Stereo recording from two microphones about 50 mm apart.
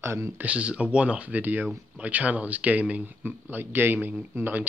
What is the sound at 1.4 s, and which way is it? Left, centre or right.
Speech, right.